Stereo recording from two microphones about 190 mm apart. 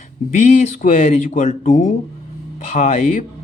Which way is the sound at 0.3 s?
40° left (ahead or behind).